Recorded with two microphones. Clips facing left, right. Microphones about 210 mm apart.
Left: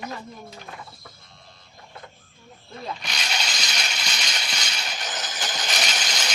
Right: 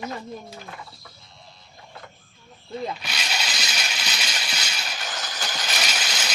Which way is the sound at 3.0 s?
5° right (ahead or behind).